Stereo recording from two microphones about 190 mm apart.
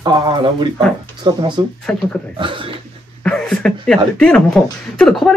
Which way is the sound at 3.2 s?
5° left (ahead or behind).